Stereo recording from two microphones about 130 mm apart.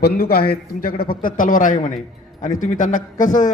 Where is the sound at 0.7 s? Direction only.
90° left.